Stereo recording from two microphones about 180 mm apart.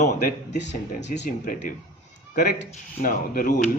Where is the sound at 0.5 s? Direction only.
75° left (ahead or behind).